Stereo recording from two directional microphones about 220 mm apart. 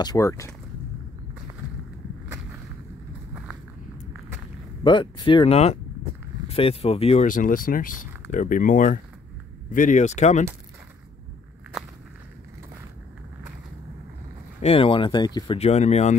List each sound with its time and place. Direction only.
0.0 s speech: 15° left (ahead or behind)
2.2 s a sound: 10° right (ahead or behind)
4.8 s speech: 20° left (ahead or behind)
11.7 s walk: centre (ahead or behind)
14.6 s speech: 25° left (ahead or behind)